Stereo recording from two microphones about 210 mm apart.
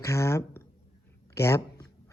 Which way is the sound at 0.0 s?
15° left (ahead or behind).